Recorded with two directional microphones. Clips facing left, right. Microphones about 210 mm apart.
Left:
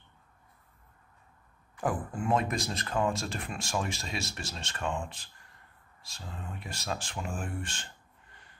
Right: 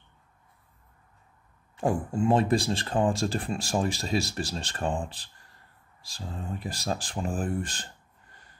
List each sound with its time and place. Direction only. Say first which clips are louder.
1.8 s speech: right 6 dB; 25° right (ahead or behind)